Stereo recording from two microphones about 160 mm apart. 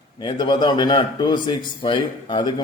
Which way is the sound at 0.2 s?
30° left (ahead or behind).